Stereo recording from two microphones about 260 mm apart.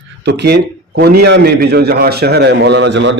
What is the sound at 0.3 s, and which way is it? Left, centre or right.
A man's voice, right.